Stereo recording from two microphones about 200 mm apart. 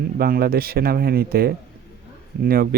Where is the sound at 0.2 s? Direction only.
50° right (ahead or behind).